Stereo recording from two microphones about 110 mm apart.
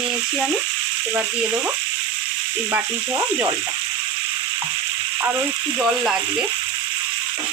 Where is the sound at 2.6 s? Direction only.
25° right (ahead or behind).